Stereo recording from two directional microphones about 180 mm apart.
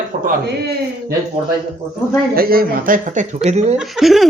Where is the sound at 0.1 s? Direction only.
45° right (ahead or behind).